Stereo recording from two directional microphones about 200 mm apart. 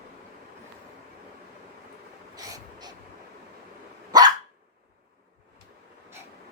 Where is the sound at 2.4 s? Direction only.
15° right (ahead or behind).